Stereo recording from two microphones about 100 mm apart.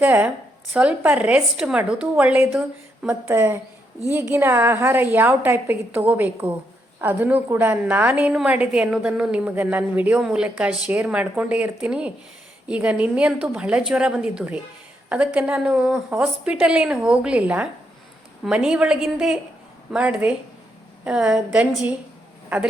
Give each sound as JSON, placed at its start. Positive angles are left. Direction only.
{"t": 0.0, "sound": "a woman's voice", "side_deg": -15}
{"t": 3.2, "sound": "a woman's voice", "side_deg": -25}